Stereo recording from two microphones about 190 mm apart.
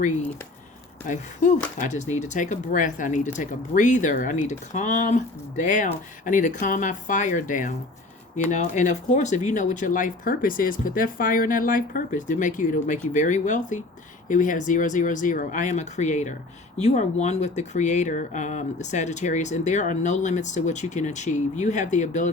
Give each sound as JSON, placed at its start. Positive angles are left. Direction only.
{"t": 1.0, "sound": "speech", "side_deg": 40}